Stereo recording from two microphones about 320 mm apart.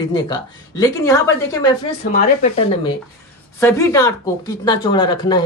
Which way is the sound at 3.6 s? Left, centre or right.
Centre.